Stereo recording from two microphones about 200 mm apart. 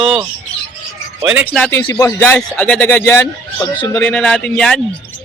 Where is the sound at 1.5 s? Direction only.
5° left (ahead or behind).